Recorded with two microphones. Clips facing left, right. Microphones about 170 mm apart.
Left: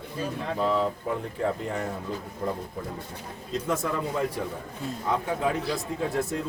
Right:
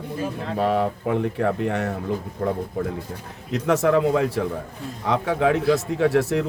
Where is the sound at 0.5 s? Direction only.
70° right (ahead or behind).